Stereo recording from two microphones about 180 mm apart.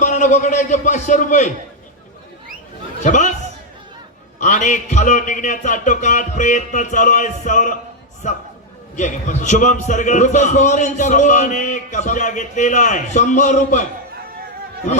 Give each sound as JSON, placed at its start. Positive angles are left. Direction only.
{"t": 0.0, "sound": "a man's voice", "side_deg": 45}
{"t": 3.0, "sound": "a man's voice", "side_deg": 40}
{"t": 4.4, "sound": "a man's voice", "side_deg": 45}
{"t": 9.0, "sound": "a man's voice", "side_deg": 45}